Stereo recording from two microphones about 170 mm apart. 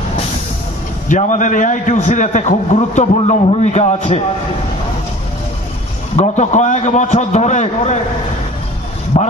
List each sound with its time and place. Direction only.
1.0 s a man's voice: 45° left (ahead or behind)
6.1 s a man's voice: 40° left (ahead or behind)
9.1 s a man's voice: 45° left (ahead or behind)